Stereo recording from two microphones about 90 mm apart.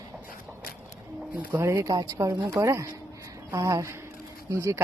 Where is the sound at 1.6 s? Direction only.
30° right (ahead or behind).